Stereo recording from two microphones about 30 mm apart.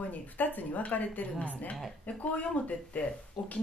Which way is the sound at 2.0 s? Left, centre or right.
Left.